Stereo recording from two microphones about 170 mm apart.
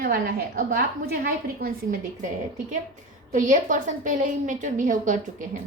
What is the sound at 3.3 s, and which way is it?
A woman's voice, 50° right (ahead or behind).